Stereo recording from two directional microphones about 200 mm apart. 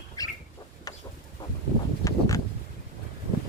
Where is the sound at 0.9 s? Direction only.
20° left (ahead or behind).